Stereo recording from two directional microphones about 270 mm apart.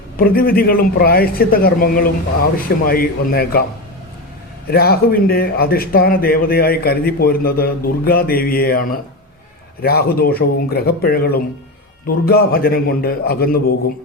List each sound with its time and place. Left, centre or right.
0.2 s speech: left
4.7 s speech: left